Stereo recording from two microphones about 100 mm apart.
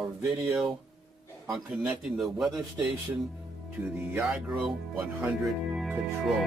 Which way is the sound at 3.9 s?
20° right (ahead or behind).